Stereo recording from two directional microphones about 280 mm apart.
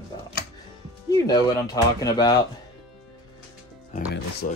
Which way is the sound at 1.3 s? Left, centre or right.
Centre.